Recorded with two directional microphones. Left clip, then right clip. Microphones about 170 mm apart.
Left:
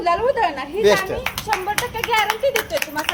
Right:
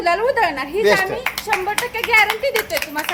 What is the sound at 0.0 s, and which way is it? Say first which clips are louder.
Speech: right 1 dB; 30° right (ahead or behind).